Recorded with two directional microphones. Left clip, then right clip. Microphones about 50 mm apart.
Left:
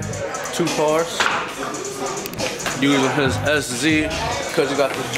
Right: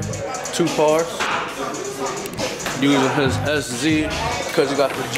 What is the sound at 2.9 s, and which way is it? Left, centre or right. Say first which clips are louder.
Speech: right 1 dB; centre.